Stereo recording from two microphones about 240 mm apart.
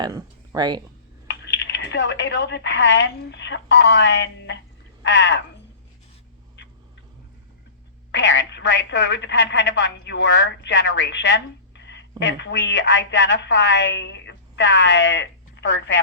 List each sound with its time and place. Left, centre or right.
0.0 s speech: centre
1.3 s a woman's voice: left
8.1 s a woman's voice: left